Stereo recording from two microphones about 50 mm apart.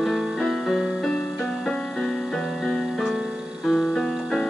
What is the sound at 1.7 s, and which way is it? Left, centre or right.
Music, centre.